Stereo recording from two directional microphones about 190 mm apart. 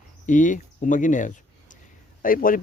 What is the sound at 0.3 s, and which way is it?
Speech, 40° left (ahead or behind).